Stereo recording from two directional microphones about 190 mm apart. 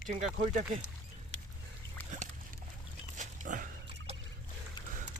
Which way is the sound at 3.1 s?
40° right (ahead or behind).